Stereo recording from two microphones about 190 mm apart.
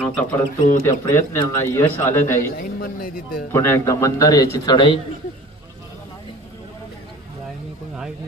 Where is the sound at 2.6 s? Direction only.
50° left (ahead or behind).